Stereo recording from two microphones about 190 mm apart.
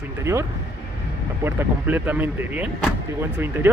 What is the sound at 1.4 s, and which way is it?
Speech, 10° right (ahead or behind).